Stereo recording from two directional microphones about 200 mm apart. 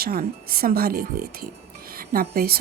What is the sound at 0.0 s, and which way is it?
A woman's voice, 45° right (ahead or behind).